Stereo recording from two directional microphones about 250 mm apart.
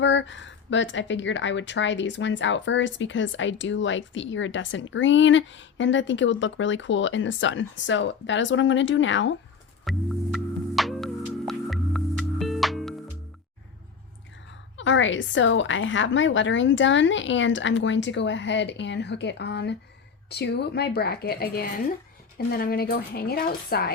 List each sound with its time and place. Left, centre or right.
0.0 s speech: left
9.8 s music: centre
14.8 s a woman's voice: left